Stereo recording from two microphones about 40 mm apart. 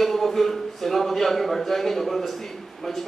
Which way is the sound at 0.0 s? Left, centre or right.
Centre.